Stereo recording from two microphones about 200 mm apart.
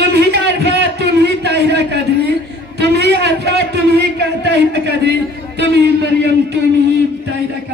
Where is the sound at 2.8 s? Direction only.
55° right (ahead or behind).